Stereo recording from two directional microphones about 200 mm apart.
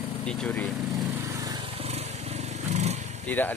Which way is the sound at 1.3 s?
20° right (ahead or behind).